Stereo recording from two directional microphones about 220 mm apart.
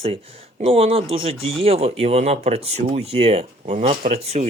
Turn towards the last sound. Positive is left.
turn(degrees=-30)  # may be behind; listen again after turning